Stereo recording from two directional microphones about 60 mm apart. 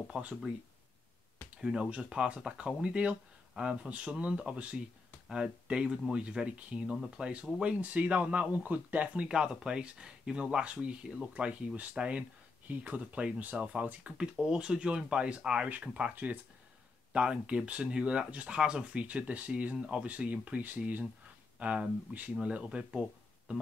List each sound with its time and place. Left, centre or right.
0.1 s speech: centre
1.6 s speech: centre
3.5 s speech: centre
3.9 s speech: centre